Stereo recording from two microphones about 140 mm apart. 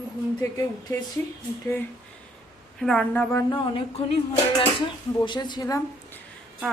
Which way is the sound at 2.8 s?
Centre (ahead or behind).